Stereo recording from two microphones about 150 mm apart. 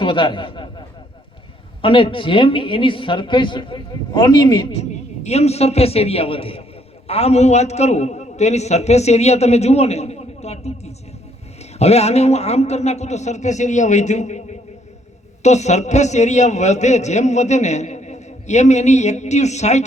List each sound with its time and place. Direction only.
0.0 s a man's voice: 35° left (ahead or behind)
1.8 s speech: 35° left (ahead or behind)
4.7 s a man's voice: 45° left (ahead or behind)
15.4 s a man's voice: 50° left (ahead or behind)